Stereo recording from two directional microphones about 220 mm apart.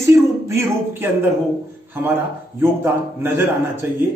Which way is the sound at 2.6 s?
10° right (ahead or behind).